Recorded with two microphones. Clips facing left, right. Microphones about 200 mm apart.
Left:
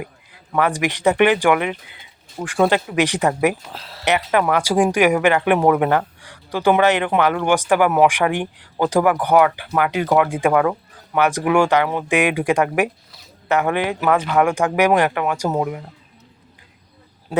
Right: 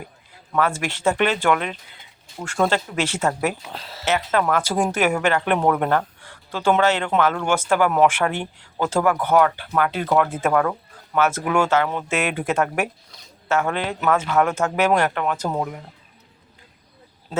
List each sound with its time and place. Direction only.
0.5 s speech: 15° left (ahead or behind)
3.6 s speech: centre (ahead or behind)
4.0 s speech: 15° left (ahead or behind)